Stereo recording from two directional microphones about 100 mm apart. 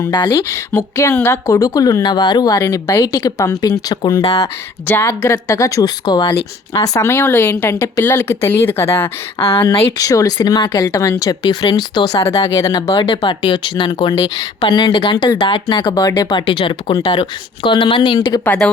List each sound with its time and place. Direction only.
0.1 s speech: 50° left (ahead or behind)
0.8 s speech: 30° left (ahead or behind); by 4.2 s 45° left (ahead or behind)
4.9 s speech: 25° left (ahead or behind); by 6.3 s 45° left (ahead or behind)
6.7 s speech: 35° left (ahead or behind)
7.1 s speech: 20° left (ahead or behind)
9.4 s speech: 45° left (ahead or behind)
10.0 s speech: 35° left (ahead or behind)
13.0 s speech: 55° left (ahead or behind)
14.1 s speech: 40° left (ahead or behind)
14.8 s speech: 55° left (ahead or behind)
18.4 s speech: 10° left (ahead or behind)